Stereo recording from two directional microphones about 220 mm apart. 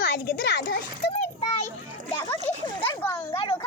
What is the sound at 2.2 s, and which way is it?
A child's voice, 20° left (ahead or behind).